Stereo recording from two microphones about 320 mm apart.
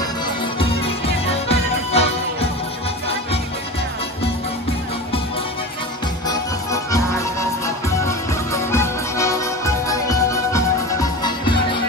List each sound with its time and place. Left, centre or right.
0.6 s music: centre
6.2 s music: centre
8.5 s music: centre